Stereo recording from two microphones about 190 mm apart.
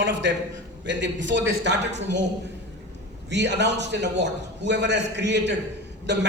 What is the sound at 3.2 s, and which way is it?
A man's voice, 65° right (ahead or behind).